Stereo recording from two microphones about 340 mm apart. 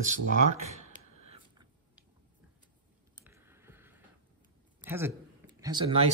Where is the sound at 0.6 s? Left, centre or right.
Centre.